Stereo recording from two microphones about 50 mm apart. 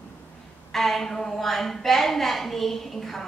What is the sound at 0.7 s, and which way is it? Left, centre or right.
Speech, centre.